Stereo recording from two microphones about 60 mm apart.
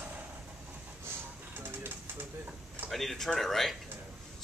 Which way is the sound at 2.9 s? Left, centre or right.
Centre.